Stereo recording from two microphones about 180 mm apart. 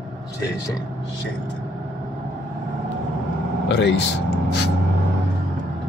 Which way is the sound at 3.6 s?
75° left (ahead or behind).